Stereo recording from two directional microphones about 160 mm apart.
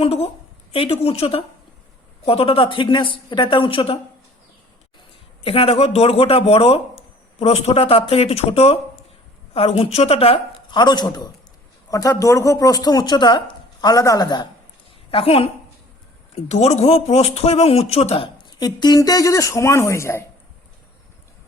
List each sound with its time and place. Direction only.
0.0 s a man's voice: 40° left (ahead or behind)
5.4 s a man's voice: 35° left (ahead or behind)
15.1 s a man's voice: 35° left (ahead or behind); by 20.2 s 15° left (ahead or behind)